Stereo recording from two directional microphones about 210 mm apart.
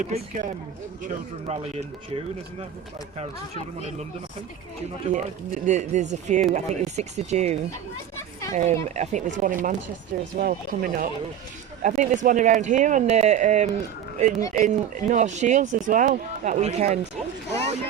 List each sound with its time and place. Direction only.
0.0 s speech: 35° right (ahead or behind)
3.2 s speech: 30° right (ahead or behind)
5.1 s speech: 35° right (ahead or behind)
8.8 s speech: 35° right (ahead or behind)